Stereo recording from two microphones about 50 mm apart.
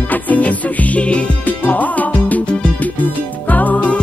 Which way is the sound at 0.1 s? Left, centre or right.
Left.